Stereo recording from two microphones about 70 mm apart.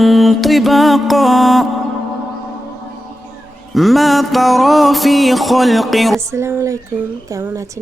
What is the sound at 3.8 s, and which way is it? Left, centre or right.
Music, centre.